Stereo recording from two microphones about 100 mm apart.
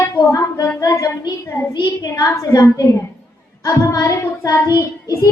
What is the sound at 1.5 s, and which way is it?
Speech, 30° left (ahead or behind).